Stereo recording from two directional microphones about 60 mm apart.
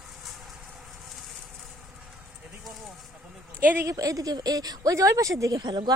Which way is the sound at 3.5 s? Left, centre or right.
Right.